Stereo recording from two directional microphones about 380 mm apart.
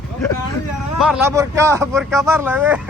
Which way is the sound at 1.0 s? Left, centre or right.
Centre.